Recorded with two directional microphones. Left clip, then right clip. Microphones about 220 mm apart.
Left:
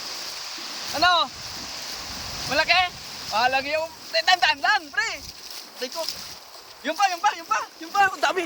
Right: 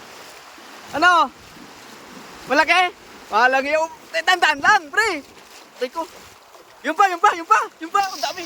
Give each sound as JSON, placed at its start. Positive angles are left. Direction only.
{"t": 0.9, "sound": "speech", "side_deg": -15}
{"t": 2.5, "sound": "speech", "side_deg": -20}
{"t": 6.8, "sound": "speech", "side_deg": -25}
{"t": 8.0, "sound": "speech", "side_deg": 15}